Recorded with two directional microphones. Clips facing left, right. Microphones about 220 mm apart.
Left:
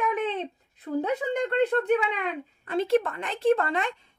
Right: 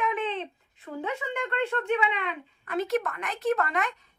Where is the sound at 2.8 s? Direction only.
30° left (ahead or behind).